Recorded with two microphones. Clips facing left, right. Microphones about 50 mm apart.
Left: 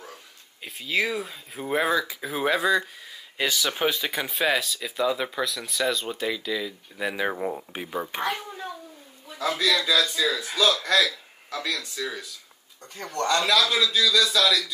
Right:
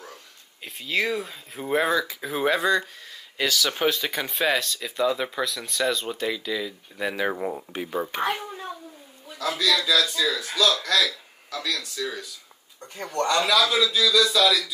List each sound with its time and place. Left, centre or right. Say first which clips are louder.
0.0 s speech: even; centre
3.4 s speech: right 1 dB; centre
3.7 s speech: right 1 dB; centre
8.2 s a child's voice: right 2 dB; centre
9.7 s speech: right 1 dB; centre
10.3 s speech: even; left
12.8 s speech: right 2 dB; centre